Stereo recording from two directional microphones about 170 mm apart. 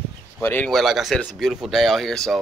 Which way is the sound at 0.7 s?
Centre (ahead or behind).